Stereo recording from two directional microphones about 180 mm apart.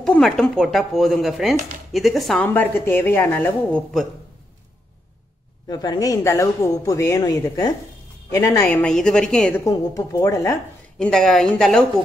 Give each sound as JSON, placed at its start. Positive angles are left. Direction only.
{"t": 0.0, "sound": "a woman's voice", "side_deg": 5}
{"t": 5.7, "sound": "speech", "side_deg": 20}
{"t": 9.7, "sound": "a woman's voice", "side_deg": 15}
{"t": 11.0, "sound": "speech", "side_deg": 5}